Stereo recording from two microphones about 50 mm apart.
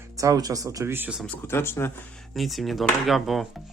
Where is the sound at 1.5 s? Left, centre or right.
Left.